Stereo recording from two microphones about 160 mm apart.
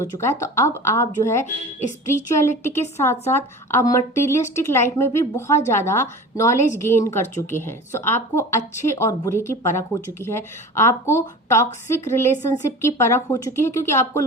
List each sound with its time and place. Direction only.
0.0 s a woman's voice: 15° left (ahead or behind)